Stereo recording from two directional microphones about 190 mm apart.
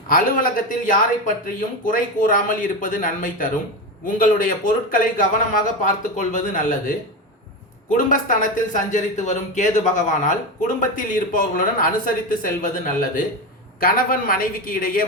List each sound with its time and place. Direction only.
0.1 s a man's voice: 45° left (ahead or behind)